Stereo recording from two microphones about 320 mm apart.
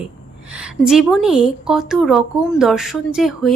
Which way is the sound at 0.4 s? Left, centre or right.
Centre.